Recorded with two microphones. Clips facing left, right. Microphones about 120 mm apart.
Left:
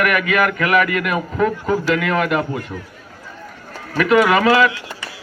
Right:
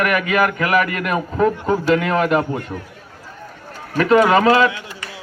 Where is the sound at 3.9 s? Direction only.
35° right (ahead or behind).